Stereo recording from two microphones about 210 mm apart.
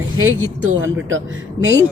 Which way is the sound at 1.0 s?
65° right (ahead or behind).